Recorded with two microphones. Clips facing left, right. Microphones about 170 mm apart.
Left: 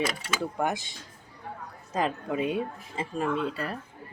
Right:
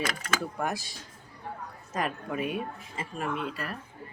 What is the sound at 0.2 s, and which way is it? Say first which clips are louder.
Speech: left 2 dB; 20° left (ahead or behind).